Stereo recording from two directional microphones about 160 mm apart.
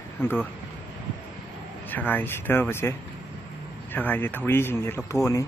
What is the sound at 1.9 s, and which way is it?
Speech, 10° left (ahead or behind).